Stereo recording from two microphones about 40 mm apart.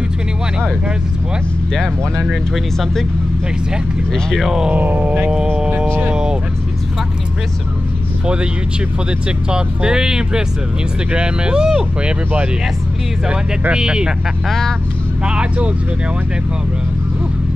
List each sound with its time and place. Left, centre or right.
1.7 s speech: centre
2.2 s speech: centre
4.1 s speech: centre
4.7 s speech: right
9.5 s speech: right
13.3 s speech: right